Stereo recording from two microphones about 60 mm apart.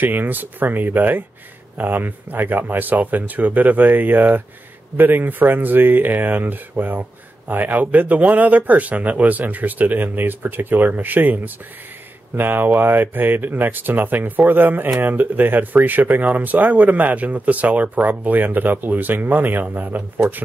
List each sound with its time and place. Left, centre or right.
0.0 s speech: right